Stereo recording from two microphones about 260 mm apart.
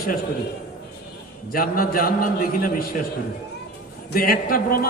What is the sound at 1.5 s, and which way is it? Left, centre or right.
A man's voice, left.